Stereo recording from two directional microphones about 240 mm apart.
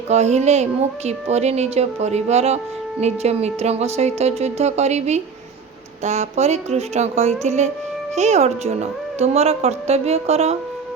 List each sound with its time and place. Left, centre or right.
0.1 s a woman's voice: right